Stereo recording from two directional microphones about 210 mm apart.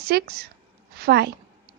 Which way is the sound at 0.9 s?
50° right (ahead or behind).